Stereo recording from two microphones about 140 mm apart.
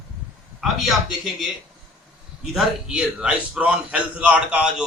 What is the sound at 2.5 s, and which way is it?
A man's voice, 5° right (ahead or behind).